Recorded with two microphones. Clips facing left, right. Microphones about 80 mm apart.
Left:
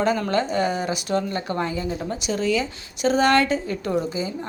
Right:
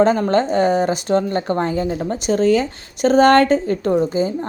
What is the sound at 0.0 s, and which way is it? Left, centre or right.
A woman's voice, right.